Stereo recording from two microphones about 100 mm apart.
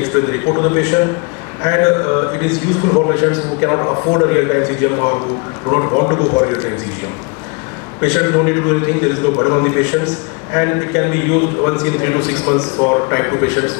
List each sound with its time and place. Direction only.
0.1 s a man's voice: 30° left (ahead or behind)
4.3 s a man's voice: 25° left (ahead or behind)
8.0 s a man's voice: 25° left (ahead or behind)